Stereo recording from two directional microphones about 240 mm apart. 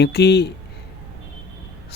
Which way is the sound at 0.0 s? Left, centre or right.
Left.